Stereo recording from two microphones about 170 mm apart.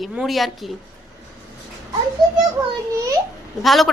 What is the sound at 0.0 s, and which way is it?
Speech, centre (ahead or behind).